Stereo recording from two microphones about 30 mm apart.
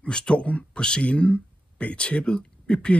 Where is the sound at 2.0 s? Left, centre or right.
Left.